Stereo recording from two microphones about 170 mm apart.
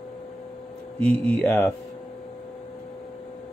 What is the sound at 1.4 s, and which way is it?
Speech, 10° left (ahead or behind).